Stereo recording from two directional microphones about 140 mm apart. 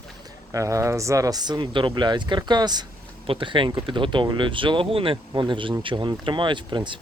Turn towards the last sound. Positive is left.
turn(degrees=-35)  # may be behind; listen again after turning